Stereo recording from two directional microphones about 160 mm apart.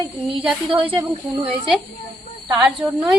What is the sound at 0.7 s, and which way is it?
Speech, 35° right (ahead or behind).